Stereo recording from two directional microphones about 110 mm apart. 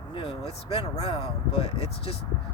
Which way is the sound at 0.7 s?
60° left (ahead or behind).